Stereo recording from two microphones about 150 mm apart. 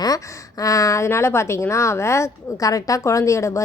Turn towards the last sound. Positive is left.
turn(degrees=20)  # may be behind; listen again after turning